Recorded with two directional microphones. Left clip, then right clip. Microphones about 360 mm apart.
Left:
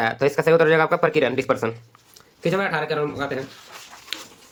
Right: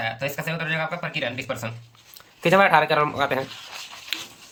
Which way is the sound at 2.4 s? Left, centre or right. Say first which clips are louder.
Right 6 dB; centre.